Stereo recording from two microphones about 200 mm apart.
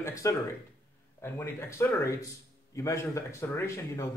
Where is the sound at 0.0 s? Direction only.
15° left (ahead or behind).